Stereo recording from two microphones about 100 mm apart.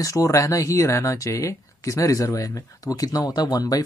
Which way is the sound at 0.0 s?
35° left (ahead or behind).